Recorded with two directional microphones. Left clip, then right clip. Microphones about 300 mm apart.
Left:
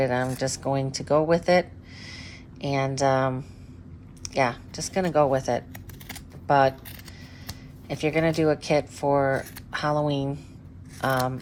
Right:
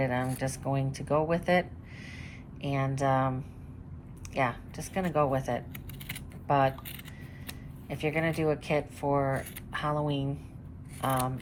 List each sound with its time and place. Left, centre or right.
0.0 s speech: centre
7.9 s speech: centre